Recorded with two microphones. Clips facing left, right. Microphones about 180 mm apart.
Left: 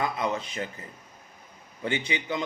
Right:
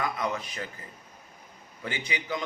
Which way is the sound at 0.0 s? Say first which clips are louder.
Left 2 dB; 25° left (ahead or behind).